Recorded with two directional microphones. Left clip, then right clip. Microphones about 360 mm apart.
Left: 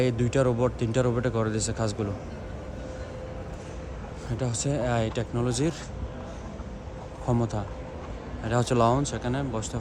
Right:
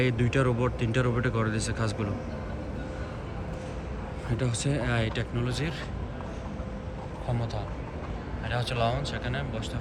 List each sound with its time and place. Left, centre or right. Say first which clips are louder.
0.0 s speech: left 2 dB; centre
4.4 s speech: left 2 dB; centre
8.5 s speech: left 6 dB; centre